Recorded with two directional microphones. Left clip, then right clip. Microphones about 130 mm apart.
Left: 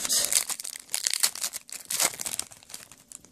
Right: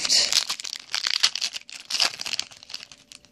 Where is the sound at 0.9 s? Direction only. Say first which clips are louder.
Right 6 dB; 40° left (ahead or behind).